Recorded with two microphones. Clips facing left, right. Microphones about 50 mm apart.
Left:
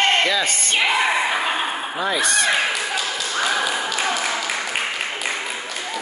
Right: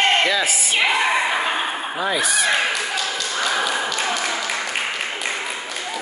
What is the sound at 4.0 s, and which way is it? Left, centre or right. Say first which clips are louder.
Applause: even; centre.